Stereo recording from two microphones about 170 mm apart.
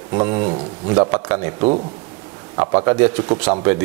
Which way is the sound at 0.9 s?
15° right (ahead or behind).